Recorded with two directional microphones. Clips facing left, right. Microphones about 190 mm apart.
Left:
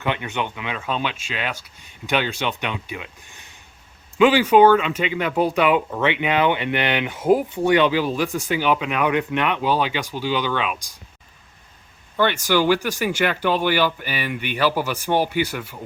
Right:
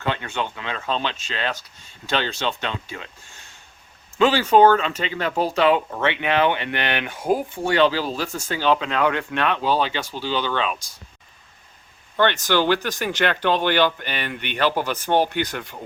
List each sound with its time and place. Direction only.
0.0 s speech: 15° left (ahead or behind)
12.1 s speech: 10° left (ahead or behind)